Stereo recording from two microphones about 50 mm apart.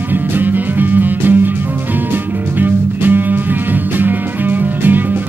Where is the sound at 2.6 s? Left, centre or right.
Right.